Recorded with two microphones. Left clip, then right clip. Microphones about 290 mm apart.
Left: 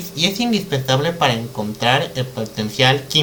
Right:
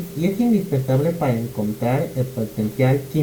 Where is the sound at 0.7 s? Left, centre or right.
Centre.